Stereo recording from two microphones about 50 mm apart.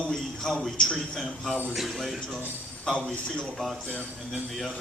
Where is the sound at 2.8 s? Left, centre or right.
Centre.